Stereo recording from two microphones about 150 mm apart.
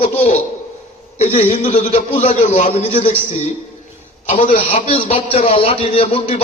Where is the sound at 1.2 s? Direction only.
45° left (ahead or behind).